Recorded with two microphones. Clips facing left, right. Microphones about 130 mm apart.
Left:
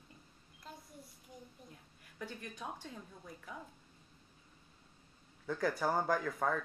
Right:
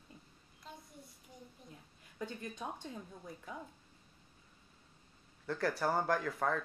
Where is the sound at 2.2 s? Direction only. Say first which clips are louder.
Right 2 dB; 20° right (ahead or behind).